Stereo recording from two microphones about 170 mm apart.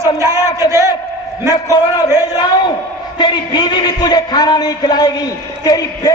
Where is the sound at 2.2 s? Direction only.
25° left (ahead or behind).